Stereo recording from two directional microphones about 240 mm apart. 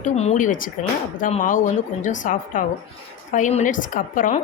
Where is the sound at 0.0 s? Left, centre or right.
Left.